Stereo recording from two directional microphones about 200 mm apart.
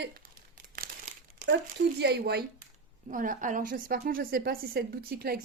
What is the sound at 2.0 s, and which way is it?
Speech, 55° right (ahead or behind).